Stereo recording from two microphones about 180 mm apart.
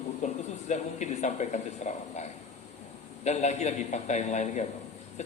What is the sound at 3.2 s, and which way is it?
A man's voice, 40° left (ahead or behind).